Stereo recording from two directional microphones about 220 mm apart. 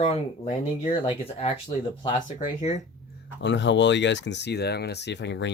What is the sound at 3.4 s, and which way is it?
Speech, 55° left (ahead or behind).